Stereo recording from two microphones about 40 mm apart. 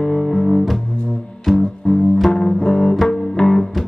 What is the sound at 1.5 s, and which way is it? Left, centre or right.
Music, centre.